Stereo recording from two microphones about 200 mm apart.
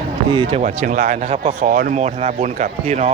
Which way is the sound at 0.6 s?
40° right (ahead or behind).